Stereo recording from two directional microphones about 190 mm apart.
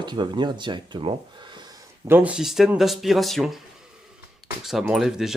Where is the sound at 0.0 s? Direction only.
25° right (ahead or behind).